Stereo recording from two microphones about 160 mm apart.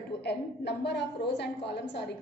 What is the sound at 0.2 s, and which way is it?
A woman's voice, 90° left.